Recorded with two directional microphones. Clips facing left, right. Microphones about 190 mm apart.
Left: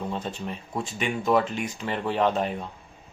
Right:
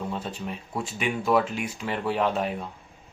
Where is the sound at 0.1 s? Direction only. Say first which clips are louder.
Left 1 dB; 5° right (ahead or behind).